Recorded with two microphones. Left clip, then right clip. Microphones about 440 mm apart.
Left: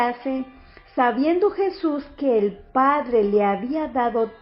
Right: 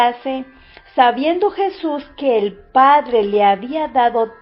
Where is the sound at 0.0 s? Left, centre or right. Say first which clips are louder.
Right 7 dB; right.